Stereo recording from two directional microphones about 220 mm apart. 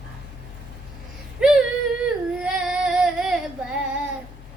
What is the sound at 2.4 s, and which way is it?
Singing, 5° right (ahead or behind).